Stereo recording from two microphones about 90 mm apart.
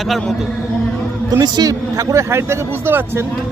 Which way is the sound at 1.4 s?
45° right (ahead or behind).